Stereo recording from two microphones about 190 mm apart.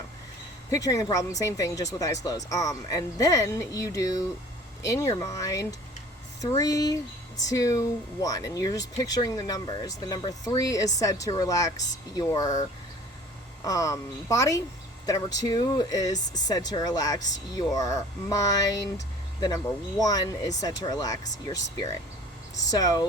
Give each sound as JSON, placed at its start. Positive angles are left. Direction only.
{"t": 0.7, "sound": "speech", "side_deg": 15}
{"t": 13.7, "sound": "speech", "side_deg": 15}
{"t": 22.5, "sound": "speech", "side_deg": 20}